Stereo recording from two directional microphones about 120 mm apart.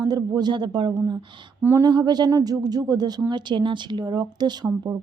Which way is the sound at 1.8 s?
35° right (ahead or behind).